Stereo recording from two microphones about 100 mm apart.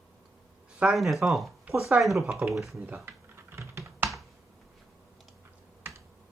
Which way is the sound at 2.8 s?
20° right (ahead or behind).